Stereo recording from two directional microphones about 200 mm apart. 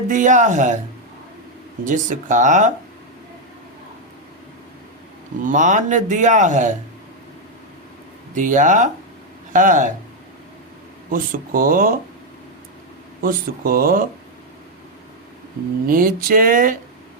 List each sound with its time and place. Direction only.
0.1 s speech: 40° right (ahead or behind)
1.8 s speech: 40° right (ahead or behind)
5.4 s speech: 40° right (ahead or behind)
8.4 s speech: 40° right (ahead or behind)
11.1 s speech: 45° right (ahead or behind)
13.2 s speech: 45° right (ahead or behind)
15.9 s speech: 45° right (ahead or behind)